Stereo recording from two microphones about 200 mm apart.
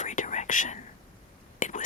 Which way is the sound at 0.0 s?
35° left (ahead or behind).